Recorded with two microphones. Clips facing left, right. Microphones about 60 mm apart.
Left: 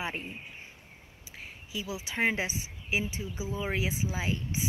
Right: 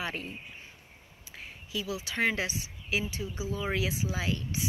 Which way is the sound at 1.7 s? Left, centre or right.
Left.